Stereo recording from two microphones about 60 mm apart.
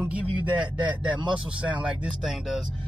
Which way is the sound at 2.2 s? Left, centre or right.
Centre.